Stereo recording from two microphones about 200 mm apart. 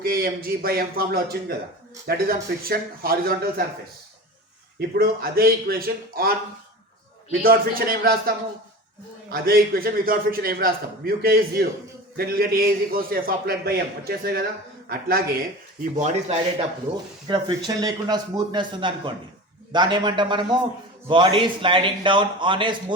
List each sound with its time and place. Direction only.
0.0 s a man's voice: 50° right (ahead or behind)
4.9 s a man's voice: 50° right (ahead or behind)
7.4 s a man's voice: 45° right (ahead or behind)
9.3 s a man's voice: 50° right (ahead or behind)
15.8 s speech: 35° right (ahead or behind)
17.2 s speech: 20° right (ahead or behind)